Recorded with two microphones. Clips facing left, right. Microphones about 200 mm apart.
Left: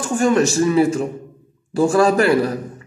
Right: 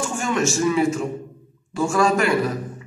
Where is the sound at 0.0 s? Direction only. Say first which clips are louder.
Left 6 dB; 35° left (ahead or behind).